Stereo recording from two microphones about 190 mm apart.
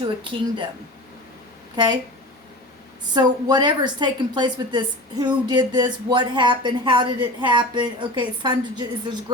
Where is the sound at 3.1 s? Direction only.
20° right (ahead or behind).